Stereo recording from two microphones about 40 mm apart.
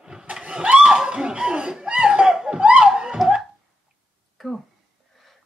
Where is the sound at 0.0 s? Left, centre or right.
Centre.